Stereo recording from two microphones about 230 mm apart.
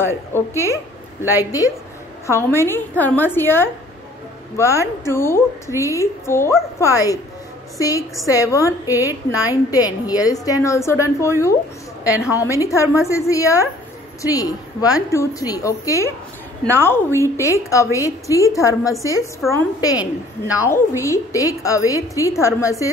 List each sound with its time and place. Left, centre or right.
0.1 s a woman's voice: centre
8.3 s a woman's voice: centre